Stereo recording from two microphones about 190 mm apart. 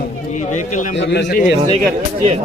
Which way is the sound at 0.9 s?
65° left (ahead or behind).